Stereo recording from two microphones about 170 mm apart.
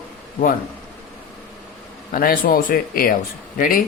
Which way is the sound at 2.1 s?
55° left (ahead or behind).